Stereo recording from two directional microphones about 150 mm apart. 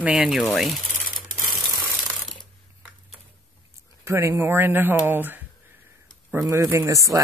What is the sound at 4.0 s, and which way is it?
Speech, 20° right (ahead or behind).